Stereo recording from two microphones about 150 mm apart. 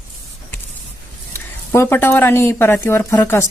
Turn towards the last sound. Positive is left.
turn(degrees=15)  # may be behind; listen again after turning